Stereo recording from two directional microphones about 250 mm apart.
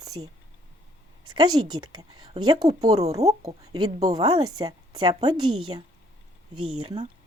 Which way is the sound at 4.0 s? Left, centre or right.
Centre.